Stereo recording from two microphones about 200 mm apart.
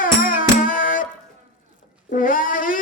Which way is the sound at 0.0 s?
45° left (ahead or behind).